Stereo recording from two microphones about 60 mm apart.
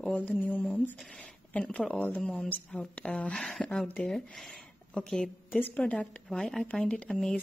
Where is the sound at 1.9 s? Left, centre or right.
Left; by 5.6 s centre.